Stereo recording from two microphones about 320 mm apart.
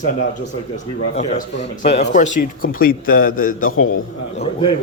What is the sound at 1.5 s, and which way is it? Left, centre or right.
A man's voice, left.